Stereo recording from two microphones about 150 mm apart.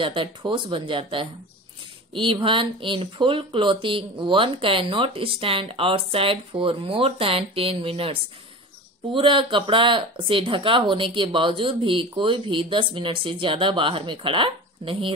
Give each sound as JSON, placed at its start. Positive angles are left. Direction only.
{"t": 0.0, "sound": "speech", "side_deg": -35}